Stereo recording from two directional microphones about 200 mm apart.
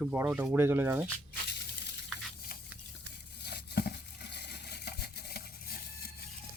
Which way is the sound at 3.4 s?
55° left (ahead or behind).